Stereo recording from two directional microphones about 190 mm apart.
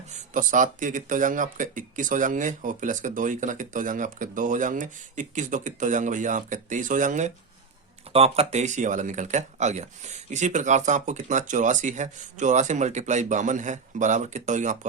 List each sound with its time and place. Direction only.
0.1 s speech: 40° right (ahead or behind)